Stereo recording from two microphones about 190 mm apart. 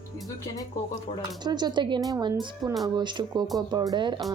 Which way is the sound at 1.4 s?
20° right (ahead or behind).